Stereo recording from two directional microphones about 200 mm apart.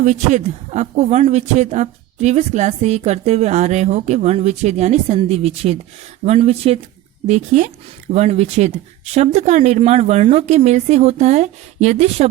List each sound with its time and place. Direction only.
0.0 s speech: 35° right (ahead or behind)